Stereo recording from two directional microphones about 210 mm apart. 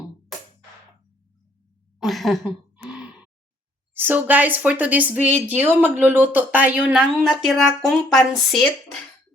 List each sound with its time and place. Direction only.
0.3 s music: centre (ahead or behind)
2.0 s a sound: centre (ahead or behind)
3.9 s speech: 10° right (ahead or behind)